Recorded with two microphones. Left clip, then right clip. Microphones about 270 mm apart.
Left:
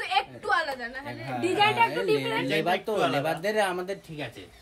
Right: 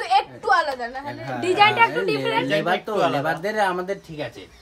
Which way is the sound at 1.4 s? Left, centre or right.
Right.